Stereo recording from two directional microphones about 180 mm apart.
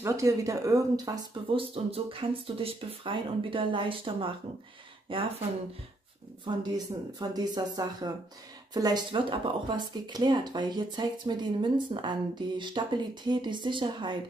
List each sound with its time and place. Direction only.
0.0 s speech: 15° right (ahead or behind)
7.2 s speech: 20° right (ahead or behind)